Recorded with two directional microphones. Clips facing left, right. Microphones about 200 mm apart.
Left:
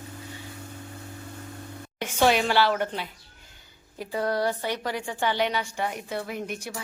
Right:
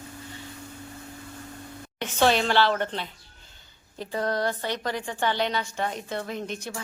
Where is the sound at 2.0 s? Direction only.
10° left (ahead or behind).